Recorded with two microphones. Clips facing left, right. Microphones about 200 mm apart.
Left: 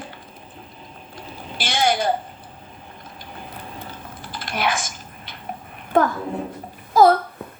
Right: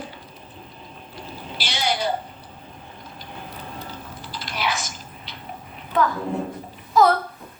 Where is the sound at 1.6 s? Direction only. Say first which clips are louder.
Left 5 dB; 50° left (ahead or behind).